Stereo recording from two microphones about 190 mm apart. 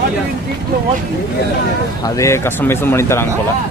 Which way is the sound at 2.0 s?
15° left (ahead or behind).